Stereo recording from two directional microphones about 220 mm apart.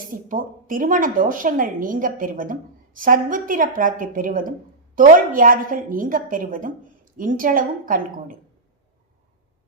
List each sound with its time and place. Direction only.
0.3 s a woman's voice: 40° right (ahead or behind)